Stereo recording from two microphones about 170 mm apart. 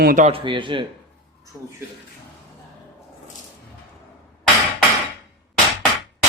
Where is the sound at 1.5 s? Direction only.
15° right (ahead or behind).